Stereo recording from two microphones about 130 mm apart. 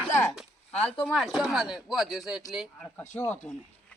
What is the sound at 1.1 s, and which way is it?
Speech, 5° right (ahead or behind).